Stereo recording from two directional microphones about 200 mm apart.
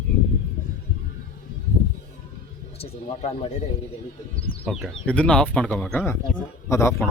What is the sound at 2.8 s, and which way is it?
Speech, 30° left (ahead or behind).